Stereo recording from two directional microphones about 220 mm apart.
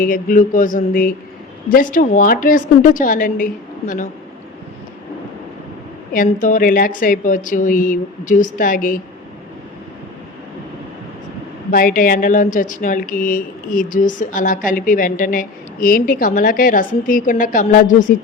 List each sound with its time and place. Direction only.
0.0 s speech: 40° left (ahead or behind)
6.1 s speech: 40° left (ahead or behind)
11.7 s speech: 40° left (ahead or behind)